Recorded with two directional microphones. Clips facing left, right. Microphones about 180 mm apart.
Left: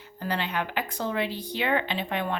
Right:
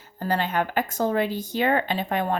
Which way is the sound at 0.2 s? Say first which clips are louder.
Right 5 dB; 45° right (ahead or behind).